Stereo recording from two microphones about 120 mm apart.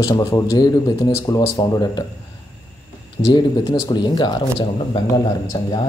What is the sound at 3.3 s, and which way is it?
A man's voice, 35° left (ahead or behind).